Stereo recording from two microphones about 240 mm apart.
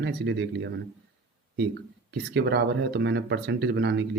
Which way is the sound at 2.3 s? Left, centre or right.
Right.